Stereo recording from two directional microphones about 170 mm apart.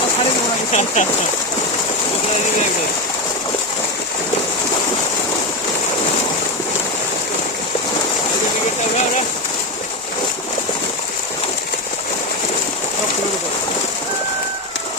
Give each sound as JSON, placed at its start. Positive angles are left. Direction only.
{"t": 0.7, "sound": "speech", "side_deg": 45}